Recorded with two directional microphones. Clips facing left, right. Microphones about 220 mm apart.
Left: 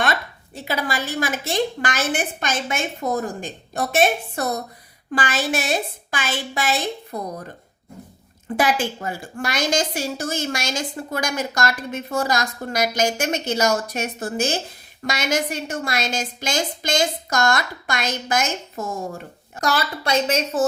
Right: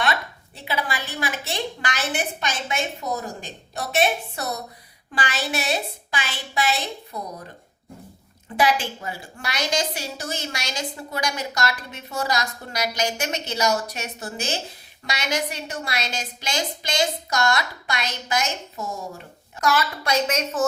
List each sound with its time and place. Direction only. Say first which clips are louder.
0.0 s a woman's voice: left 2 dB; 45° left (ahead or behind)
8.5 s a woman's voice: left 1 dB; 50° left (ahead or behind)
19.5 s a woman's voice: even; 30° left (ahead or behind)